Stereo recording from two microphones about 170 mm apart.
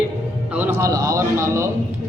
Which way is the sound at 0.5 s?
10° right (ahead or behind).